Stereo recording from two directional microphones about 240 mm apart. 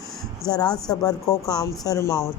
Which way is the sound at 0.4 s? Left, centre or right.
Centre.